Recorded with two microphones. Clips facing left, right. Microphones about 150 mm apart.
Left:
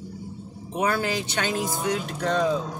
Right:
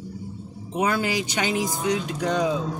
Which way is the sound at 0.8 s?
15° right (ahead or behind).